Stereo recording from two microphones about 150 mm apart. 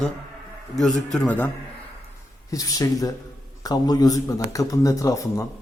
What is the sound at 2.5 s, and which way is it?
A man's voice, 25° left (ahead or behind).